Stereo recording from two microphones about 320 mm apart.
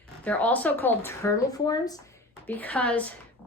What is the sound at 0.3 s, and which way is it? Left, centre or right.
A woman's voice, centre.